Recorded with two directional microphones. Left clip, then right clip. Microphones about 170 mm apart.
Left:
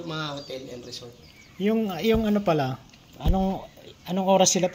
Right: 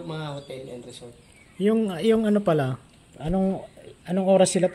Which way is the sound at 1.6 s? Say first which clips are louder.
Right 2 dB; 35° right (ahead or behind).